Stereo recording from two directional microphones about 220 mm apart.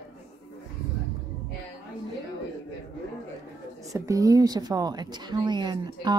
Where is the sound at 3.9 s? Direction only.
15° right (ahead or behind).